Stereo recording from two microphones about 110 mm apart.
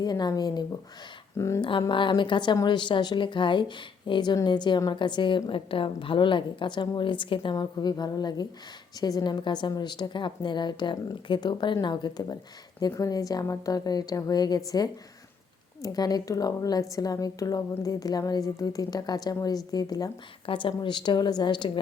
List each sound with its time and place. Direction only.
0.0 s a woman's voice: 40° left (ahead or behind)
1.4 s speech: 25° left (ahead or behind)
1.9 s a woman's voice: 50° left (ahead or behind)
7.5 s a woman's voice: 40° left (ahead or behind)
20.5 s a woman's voice: 50° left (ahead or behind)